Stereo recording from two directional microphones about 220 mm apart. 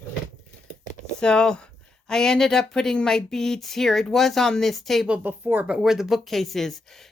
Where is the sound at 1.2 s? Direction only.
5° left (ahead or behind).